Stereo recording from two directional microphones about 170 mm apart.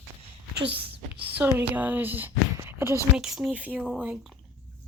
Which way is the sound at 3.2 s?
Centre (ahead or behind).